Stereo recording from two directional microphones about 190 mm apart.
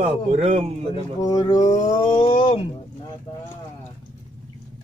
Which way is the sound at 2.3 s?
30° left (ahead or behind).